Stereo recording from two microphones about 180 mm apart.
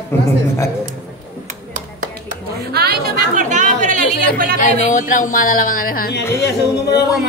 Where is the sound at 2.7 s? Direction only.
60° right (ahead or behind); by 4.0 s 45° right (ahead or behind).